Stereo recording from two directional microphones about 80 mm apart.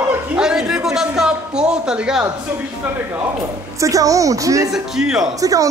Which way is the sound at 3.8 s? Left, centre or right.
Right.